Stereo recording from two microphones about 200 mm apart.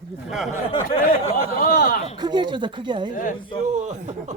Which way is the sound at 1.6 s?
45° left (ahead or behind).